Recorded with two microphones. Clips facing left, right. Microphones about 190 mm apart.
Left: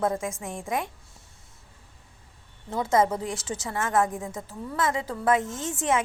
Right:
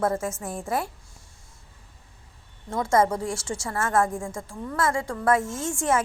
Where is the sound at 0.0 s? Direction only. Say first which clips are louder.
Right 1 dB; 15° left (ahead or behind).